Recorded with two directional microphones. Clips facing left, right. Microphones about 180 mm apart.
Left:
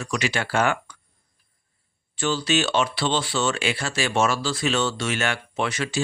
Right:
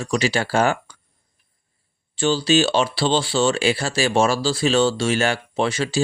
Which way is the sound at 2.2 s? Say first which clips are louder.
Right 5 dB; 30° right (ahead or behind).